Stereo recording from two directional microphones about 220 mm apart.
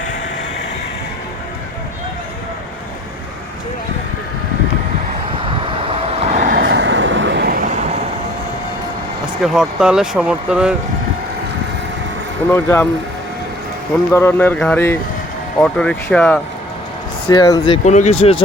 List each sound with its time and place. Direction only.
5.5 s vehicle: 25° right (ahead or behind); by 7.9 s 40° right (ahead or behind)
9.4 s speech: centre (ahead or behind)
12.6 s speech: 10° left (ahead or behind)
14.1 s speech: 10° left (ahead or behind)
17.2 s speech: 20° left (ahead or behind)
17.8 s speech: 30° left (ahead or behind)